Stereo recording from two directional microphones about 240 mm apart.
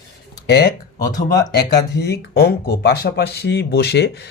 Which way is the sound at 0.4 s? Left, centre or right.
Left.